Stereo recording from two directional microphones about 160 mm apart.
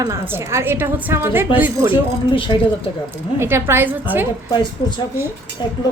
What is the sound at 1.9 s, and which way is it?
Speech, 30° left (ahead or behind).